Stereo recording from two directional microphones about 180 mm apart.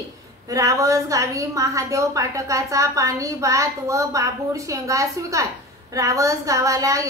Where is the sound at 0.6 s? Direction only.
15° right (ahead or behind).